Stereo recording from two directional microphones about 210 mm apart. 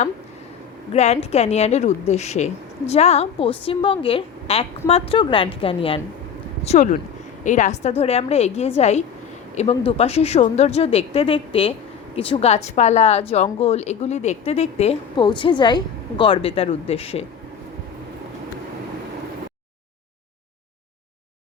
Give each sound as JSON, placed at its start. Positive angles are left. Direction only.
{"t": 0.9, "sound": "a woman's voice", "side_deg": 30}
{"t": 6.7, "sound": "a woman's voice", "side_deg": 35}